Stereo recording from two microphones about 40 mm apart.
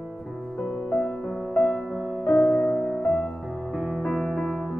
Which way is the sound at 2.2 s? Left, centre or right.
Centre.